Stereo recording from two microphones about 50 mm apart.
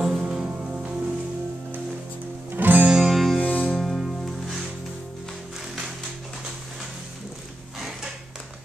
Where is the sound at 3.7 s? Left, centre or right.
Centre.